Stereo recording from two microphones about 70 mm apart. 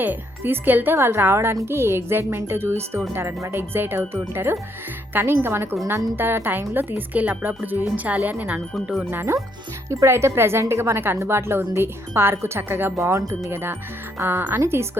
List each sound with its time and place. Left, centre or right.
0.0 s a woman's voice: right
9.0 s speech: right
13.0 s speech: right
13.5 s speech: right